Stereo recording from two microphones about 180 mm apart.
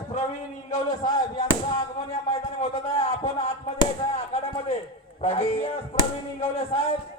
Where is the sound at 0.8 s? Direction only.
20° left (ahead or behind).